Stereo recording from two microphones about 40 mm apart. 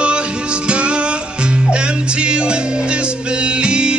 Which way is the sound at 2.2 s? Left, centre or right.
Right.